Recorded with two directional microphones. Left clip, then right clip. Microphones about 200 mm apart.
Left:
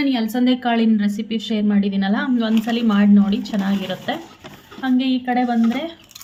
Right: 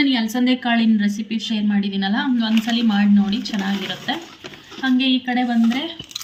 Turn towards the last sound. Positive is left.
turn(degrees=35)  # may be behind; listen again after turning